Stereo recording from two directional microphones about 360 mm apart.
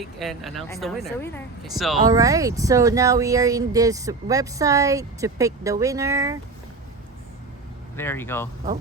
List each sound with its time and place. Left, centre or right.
0.2 s speech: centre
7.9 s speech: centre